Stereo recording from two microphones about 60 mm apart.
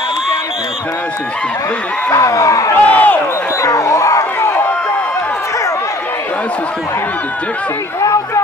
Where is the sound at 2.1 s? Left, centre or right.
Left.